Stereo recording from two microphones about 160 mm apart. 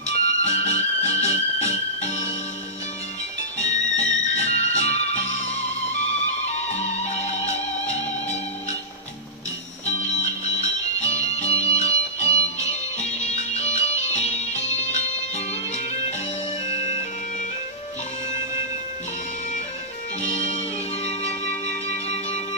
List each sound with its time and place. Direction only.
0.4 s music: 45° left (ahead or behind)
3.5 s music: 45° left (ahead or behind)
9.8 s music: 45° left (ahead or behind)
20.2 s music: 45° left (ahead or behind)